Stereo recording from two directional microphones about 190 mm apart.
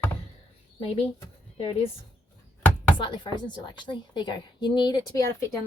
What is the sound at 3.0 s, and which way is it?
A woman's voice, 25° left (ahead or behind).